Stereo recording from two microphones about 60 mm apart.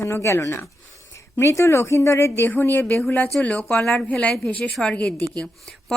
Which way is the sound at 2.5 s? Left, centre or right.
Left.